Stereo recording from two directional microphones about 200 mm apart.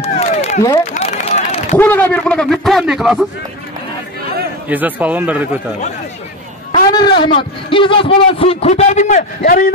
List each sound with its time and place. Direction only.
0.0 s a sound: 35° left (ahead or behind)
0.9 s run: 30° left (ahead or behind)
1.8 s a man's voice: 10° left (ahead or behind)
4.6 s a man's voice: 10° right (ahead or behind)
6.9 s a man's voice: 20° left (ahead or behind); by 9.8 s 50° left (ahead or behind)